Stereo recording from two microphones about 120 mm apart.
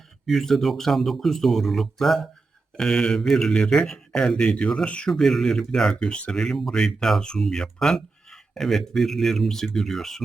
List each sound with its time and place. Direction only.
0.3 s speech: centre (ahead or behind)